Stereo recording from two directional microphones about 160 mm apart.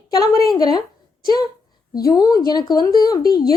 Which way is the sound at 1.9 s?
25° left (ahead or behind).